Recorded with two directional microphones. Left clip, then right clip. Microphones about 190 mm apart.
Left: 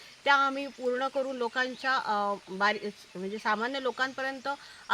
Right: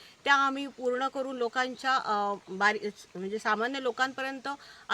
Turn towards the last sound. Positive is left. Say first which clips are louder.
# left 2 dB
turn(degrees=-25)  # may be behind; listen again after turning